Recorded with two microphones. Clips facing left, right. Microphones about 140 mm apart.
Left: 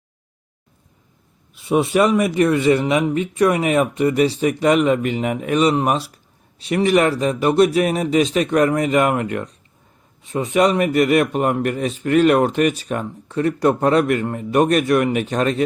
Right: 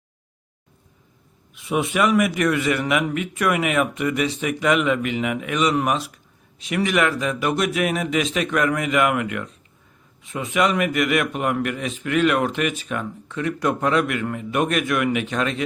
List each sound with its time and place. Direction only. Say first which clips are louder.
1.5 s a man's voice: left 5 dB; 30° left (ahead or behind)